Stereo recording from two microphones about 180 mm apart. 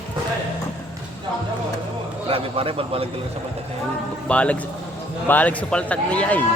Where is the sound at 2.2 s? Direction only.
30° right (ahead or behind).